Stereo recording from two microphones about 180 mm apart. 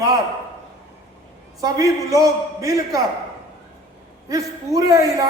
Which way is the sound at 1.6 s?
20° right (ahead or behind).